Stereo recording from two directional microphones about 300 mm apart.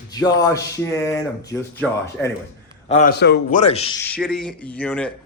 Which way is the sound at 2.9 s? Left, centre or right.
Left.